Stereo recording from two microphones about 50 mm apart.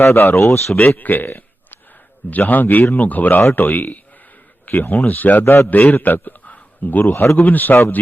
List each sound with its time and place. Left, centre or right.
0.0 s speech: left
0.3 s a man's voice: left